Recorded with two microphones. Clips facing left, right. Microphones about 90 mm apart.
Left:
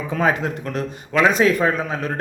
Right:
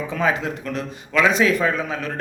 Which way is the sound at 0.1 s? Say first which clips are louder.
Left 3 dB; 45° left (ahead or behind).